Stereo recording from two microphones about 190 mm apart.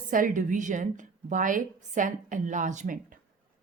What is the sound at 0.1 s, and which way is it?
A woman's voice, 45° right (ahead or behind).